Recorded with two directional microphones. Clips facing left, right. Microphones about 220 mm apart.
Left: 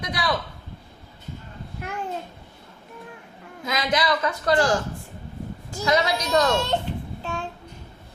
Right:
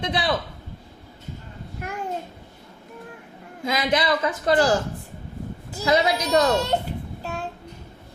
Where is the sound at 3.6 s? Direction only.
25° right (ahead or behind).